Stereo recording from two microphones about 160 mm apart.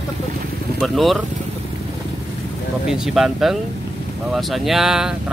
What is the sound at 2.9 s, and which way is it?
Speech, centre (ahead or behind).